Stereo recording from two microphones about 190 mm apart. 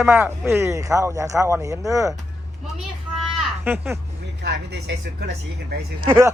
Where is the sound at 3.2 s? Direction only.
10° right (ahead or behind).